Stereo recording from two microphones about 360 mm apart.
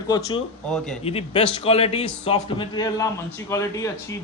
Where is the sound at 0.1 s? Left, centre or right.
Centre.